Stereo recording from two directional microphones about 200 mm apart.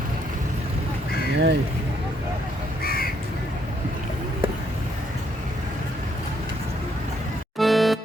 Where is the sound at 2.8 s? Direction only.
50° left (ahead or behind).